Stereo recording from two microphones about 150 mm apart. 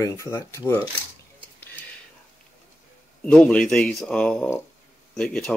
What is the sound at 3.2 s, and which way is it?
Speech, 10° left (ahead or behind).